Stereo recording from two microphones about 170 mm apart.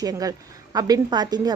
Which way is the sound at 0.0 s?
20° right (ahead or behind).